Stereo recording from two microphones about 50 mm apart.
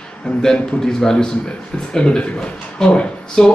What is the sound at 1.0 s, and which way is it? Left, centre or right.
A man's voice, centre.